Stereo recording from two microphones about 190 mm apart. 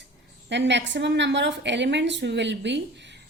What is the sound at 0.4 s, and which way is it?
A woman's voice, 70° right (ahead or behind).